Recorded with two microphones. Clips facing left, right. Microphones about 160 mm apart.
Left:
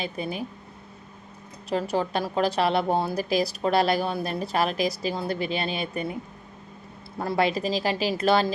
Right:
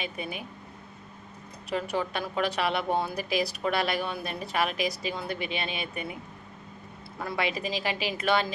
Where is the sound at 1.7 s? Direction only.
35° left (ahead or behind).